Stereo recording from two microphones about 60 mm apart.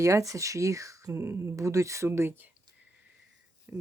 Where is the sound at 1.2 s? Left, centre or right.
Right.